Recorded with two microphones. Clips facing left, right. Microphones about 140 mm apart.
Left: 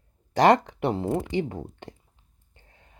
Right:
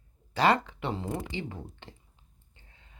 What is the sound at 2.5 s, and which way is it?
Whispering, 45° left (ahead or behind).